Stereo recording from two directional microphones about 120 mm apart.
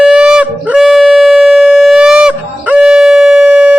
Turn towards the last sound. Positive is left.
turn(degrees=-5)  # may be behind; listen again after turning